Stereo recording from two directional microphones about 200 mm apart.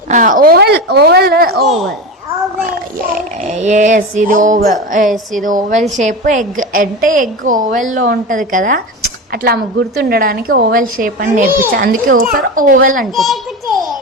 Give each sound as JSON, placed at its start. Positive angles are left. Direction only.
{"t": 0.1, "sound": "a woman's voice", "side_deg": -40}
{"t": 1.6, "sound": "speech", "side_deg": 0}
{"t": 3.4, "sound": "a woman's voice", "side_deg": -35}
{"t": 13.1, "sound": "a sound", "side_deg": 0}